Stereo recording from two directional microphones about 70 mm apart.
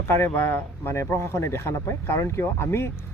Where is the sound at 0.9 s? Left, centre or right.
Left.